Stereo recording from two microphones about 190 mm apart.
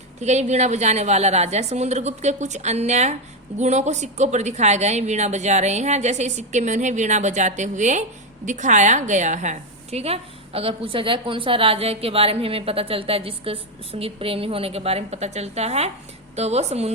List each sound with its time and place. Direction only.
0.2 s a woman's voice: 35° right (ahead or behind)